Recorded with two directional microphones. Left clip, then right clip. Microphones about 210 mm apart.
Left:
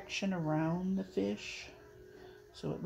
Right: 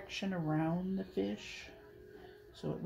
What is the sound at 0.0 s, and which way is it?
Speech, 30° left (ahead or behind).